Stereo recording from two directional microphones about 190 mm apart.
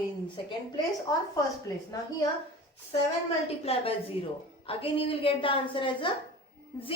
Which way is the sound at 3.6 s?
30° left (ahead or behind).